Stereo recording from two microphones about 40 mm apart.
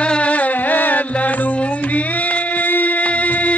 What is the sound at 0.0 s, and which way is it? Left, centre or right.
Middle eastern music, left.